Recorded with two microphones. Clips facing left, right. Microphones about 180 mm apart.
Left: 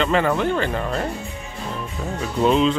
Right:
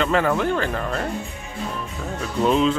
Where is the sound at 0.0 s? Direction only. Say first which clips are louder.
Left 1 dB; centre (ahead or behind).